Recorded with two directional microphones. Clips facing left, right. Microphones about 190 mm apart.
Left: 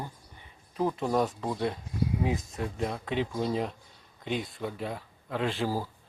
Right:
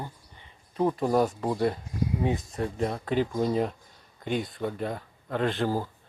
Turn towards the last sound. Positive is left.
turn(degrees=5)  # may be behind; listen again after turning